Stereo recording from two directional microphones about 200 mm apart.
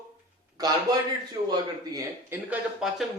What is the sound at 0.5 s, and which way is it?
A man's voice, 20° right (ahead or behind).